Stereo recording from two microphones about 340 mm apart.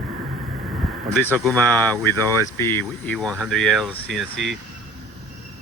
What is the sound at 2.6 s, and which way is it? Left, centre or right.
Speech, centre.